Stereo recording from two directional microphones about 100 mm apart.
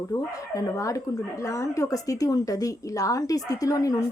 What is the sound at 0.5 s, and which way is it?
Speech, 35° left (ahead or behind).